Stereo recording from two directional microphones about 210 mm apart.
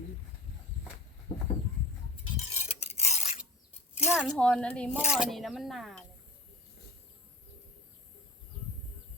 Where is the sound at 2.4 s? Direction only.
30° left (ahead or behind).